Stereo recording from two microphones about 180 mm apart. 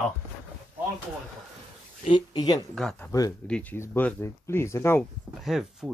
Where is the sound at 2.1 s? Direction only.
25° left (ahead or behind).